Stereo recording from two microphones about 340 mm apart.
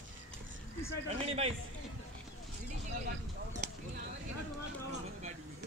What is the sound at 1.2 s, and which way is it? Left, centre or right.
Speech, centre.